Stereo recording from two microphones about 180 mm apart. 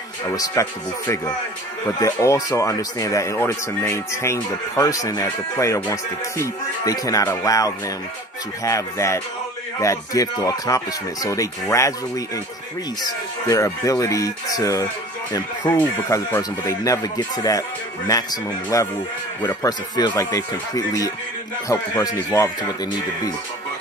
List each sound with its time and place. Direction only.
0.3 s speech: 20° left (ahead or behind)
13.5 s speech: 20° left (ahead or behind)